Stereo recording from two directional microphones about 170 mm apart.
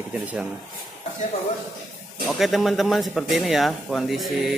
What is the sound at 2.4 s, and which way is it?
A man's voice, centre (ahead or behind).